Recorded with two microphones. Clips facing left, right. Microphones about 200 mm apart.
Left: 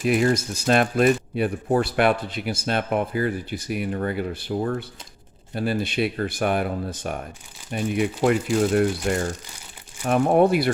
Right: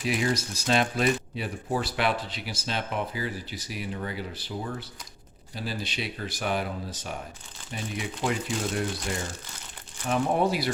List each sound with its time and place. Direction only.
0.0 s speech: 50° left (ahead or behind)